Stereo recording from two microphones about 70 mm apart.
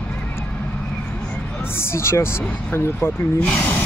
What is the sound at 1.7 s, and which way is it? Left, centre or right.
Speech, left.